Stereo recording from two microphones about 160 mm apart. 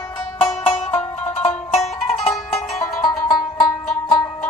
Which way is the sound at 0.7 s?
40° left (ahead or behind).